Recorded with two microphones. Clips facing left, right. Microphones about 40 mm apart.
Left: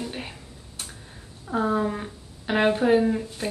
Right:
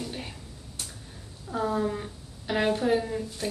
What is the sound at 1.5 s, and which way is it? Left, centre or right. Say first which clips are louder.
A woman's voice: left 3 dB; left.